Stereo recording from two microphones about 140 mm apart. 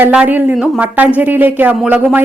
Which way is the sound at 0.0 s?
10° right (ahead or behind).